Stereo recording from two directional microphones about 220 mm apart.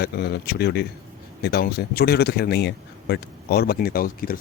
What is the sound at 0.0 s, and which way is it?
Speech, 45° left (ahead or behind).